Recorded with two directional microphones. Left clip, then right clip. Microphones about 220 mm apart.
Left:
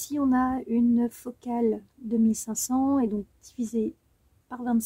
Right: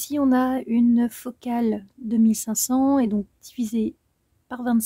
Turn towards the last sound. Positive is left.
turn(degrees=-40)  # may be behind; listen again after turning